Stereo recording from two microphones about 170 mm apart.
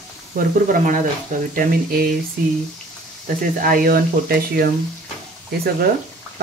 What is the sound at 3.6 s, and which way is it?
Speech, 60° right (ahead or behind).